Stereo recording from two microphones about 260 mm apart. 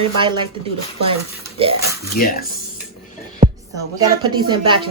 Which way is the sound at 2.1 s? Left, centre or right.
Left.